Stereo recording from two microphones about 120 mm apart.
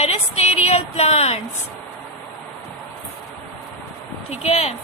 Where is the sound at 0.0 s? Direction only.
60° left (ahead or behind).